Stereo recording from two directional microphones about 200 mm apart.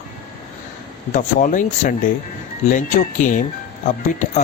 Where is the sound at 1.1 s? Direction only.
40° left (ahead or behind).